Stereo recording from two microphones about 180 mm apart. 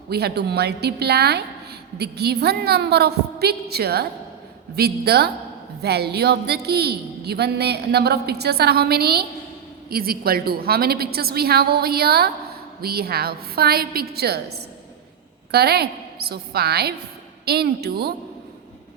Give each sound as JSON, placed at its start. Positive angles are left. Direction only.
{"t": 0.1, "sound": "a woman's voice", "side_deg": -65}